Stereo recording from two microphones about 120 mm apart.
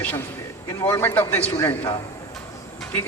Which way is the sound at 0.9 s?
15° left (ahead or behind).